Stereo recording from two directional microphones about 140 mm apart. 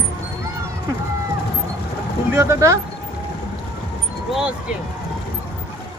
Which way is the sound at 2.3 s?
20° right (ahead or behind).